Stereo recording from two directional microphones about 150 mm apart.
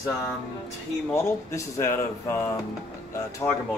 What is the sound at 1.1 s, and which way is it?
Speech, 20° left (ahead or behind).